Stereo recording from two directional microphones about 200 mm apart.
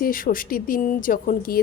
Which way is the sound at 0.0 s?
45° left (ahead or behind).